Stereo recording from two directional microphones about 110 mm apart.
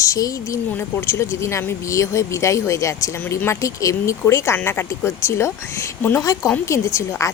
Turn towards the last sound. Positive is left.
turn(degrees=25)  # may be behind; listen again after turning